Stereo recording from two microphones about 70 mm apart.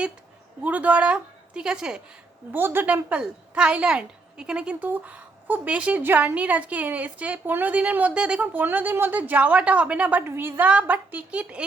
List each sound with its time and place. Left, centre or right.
0.6 s a woman's voice: right
2.5 s a woman's voice: right
2.8 s a woman's voice: centre
6.0 s a woman's voice: right
8.5 s a woman's voice: right